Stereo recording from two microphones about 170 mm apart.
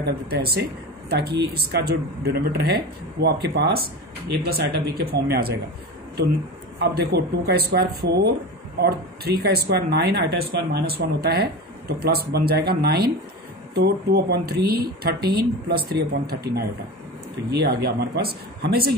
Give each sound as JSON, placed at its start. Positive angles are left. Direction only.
{"t": 0.0, "sound": "speech", "side_deg": -65}
{"t": 6.8, "sound": "speech", "side_deg": -70}